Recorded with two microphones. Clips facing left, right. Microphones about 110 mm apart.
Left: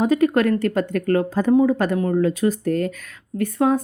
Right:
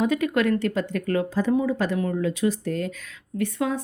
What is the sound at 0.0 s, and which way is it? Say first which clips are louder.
Speech: left 5 dB; 40° left (ahead or behind).